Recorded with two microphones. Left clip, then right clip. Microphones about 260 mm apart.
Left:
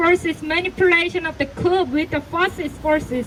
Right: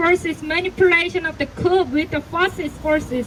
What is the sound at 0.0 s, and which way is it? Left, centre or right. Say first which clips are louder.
Speech: left 1 dB; left.